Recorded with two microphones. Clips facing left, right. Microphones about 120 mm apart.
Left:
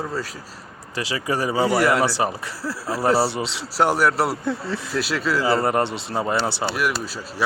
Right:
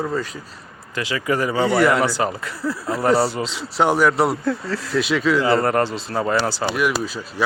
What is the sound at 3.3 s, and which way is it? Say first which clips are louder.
Speech: right 1 dB; 25° left (ahead or behind).